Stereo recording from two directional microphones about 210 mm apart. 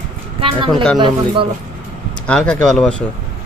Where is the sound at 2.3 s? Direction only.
5° left (ahead or behind).